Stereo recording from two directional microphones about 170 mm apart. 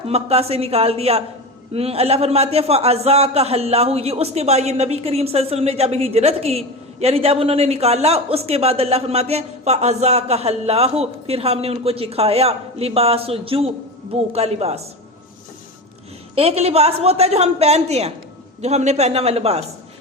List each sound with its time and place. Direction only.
0.1 s a man's voice: 35° right (ahead or behind)
16.3 s a man's voice: 35° right (ahead or behind)